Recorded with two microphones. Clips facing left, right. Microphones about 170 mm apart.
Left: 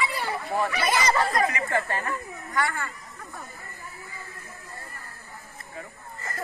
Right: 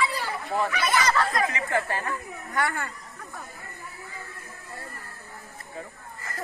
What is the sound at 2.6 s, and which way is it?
Speech, 55° right (ahead or behind).